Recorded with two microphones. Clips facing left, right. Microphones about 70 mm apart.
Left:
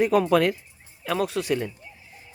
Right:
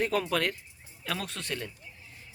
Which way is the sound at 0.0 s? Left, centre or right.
Centre.